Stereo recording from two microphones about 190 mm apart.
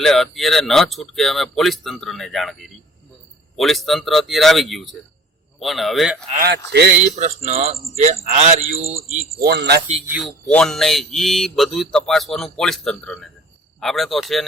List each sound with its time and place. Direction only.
0.0 s speech: centre (ahead or behind)
6.3 s speech: 50° right (ahead or behind)
7.2 s speech: 35° right (ahead or behind)
9.4 s speech: 60° right (ahead or behind)
10.1 s speech: centre (ahead or behind)